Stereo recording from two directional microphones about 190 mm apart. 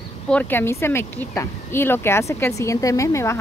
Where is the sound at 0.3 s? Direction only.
10° left (ahead or behind).